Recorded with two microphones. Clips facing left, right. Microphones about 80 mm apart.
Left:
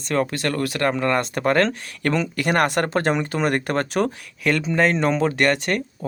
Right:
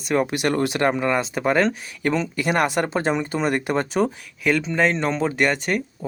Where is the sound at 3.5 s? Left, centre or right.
Left.